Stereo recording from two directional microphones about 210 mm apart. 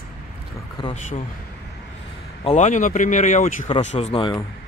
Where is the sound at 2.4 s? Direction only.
35° left (ahead or behind).